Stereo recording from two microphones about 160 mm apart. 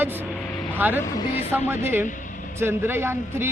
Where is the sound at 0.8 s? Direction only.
10° right (ahead or behind).